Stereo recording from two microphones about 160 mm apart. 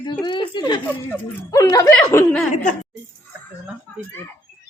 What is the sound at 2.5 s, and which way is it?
Speech, 50° left (ahead or behind).